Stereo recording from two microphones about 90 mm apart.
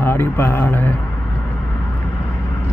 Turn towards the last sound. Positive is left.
turn(degrees=20)  # may be behind; listen again after turning